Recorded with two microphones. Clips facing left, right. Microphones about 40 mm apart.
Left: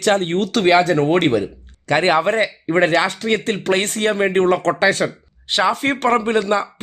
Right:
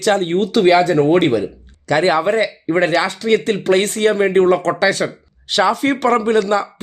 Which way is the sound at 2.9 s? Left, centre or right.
Left.